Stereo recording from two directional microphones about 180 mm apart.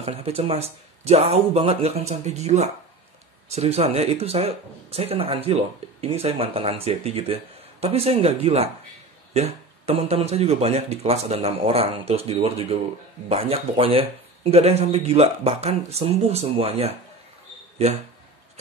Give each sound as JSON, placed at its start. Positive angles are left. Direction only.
{"t": 0.0, "sound": "speech", "side_deg": -35}